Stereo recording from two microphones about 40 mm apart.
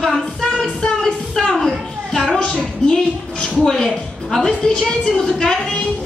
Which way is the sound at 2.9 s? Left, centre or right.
Centre.